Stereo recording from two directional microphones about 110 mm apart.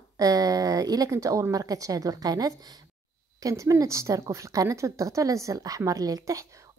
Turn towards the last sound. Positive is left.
turn(degrees=-30)  # may be behind; listen again after turning